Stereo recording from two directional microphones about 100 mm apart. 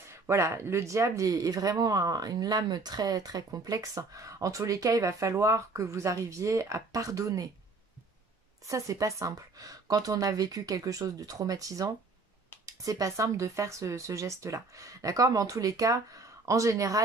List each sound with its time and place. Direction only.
0.1 s speech: 25° right (ahead or behind)
8.6 s speech: 35° right (ahead or behind)